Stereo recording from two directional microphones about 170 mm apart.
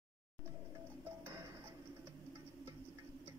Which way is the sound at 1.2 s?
15° right (ahead or behind).